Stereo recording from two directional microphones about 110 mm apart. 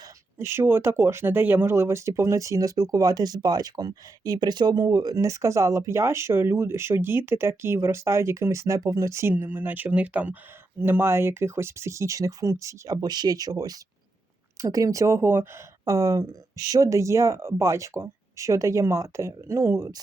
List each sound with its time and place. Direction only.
0.3 s speech: 25° right (ahead or behind)